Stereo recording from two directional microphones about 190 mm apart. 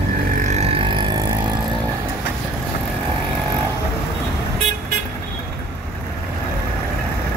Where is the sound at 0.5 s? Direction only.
30° right (ahead or behind).